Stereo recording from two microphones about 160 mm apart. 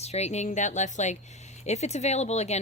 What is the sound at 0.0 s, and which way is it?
A woman's voice, 40° left (ahead or behind).